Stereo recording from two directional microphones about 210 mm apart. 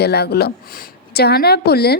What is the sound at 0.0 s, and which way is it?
A woman's voice, 50° left (ahead or behind).